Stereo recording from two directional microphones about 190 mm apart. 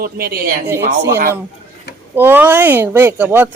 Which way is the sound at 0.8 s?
65° right (ahead or behind).